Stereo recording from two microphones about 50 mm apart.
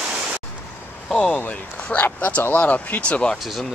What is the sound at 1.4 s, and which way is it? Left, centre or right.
Speech, left.